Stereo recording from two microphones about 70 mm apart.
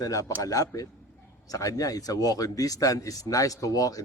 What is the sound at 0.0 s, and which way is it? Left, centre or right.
Speech, left.